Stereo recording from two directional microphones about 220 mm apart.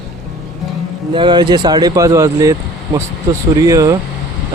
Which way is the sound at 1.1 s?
20° right (ahead or behind).